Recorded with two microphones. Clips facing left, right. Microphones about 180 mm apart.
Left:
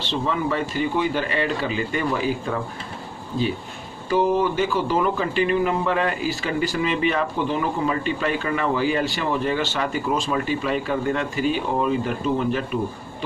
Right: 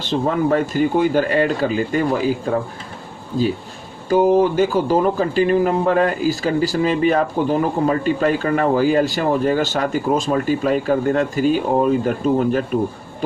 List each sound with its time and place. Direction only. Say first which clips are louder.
0.0 s a man's voice: right 6 dB; 45° right (ahead or behind)
4.1 s a man's voice: right 6 dB; 45° right (ahead or behind)